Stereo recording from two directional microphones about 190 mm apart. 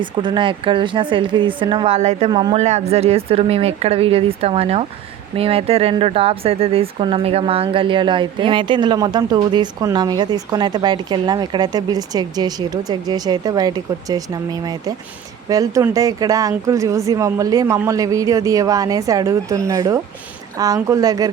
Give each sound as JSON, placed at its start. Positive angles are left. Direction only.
{"t": 0.0, "sound": "speech", "side_deg": -25}
{"t": 2.6, "sound": "a woman's voice", "side_deg": -35}